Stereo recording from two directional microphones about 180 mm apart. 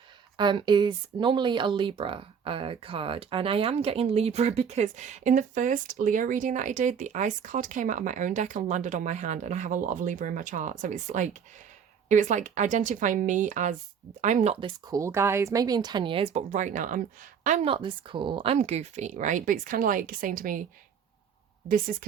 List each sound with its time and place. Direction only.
0.3 s speech: 25° right (ahead or behind)
14.8 s speech: 15° right (ahead or behind); by 20.7 s 50° right (ahead or behind)
21.7 s speech: 50° right (ahead or behind)